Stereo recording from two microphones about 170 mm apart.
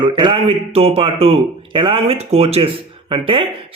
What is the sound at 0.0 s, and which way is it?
Speech, 30° right (ahead or behind).